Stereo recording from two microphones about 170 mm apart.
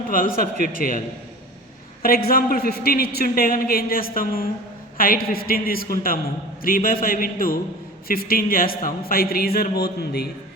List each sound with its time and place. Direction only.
0.1 s a man's voice: 55° left (ahead or behind)